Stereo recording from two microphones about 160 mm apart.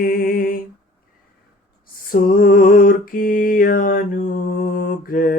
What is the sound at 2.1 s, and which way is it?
Mantra, 60° left (ahead or behind).